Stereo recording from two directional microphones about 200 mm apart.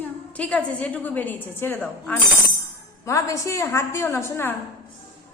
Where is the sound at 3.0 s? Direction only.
15° left (ahead or behind).